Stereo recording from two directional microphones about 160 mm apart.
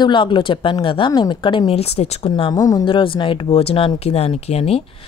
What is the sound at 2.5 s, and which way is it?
A woman's voice, 25° left (ahead or behind).